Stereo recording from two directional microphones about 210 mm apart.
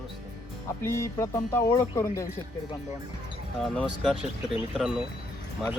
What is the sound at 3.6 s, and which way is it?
Speech, centre (ahead or behind).